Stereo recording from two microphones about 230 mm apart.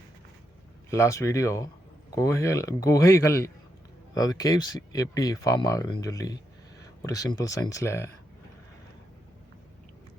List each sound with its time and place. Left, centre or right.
0.9 s speech: centre